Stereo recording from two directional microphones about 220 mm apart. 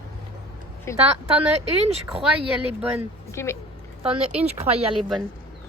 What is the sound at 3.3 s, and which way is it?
Speech, 10° left (ahead or behind).